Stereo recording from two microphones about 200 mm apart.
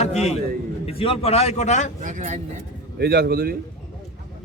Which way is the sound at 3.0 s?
55° right (ahead or behind).